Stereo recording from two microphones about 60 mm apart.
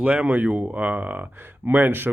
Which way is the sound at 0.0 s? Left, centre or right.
Right.